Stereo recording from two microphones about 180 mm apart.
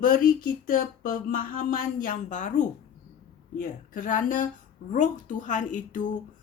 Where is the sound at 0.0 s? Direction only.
50° left (ahead or behind).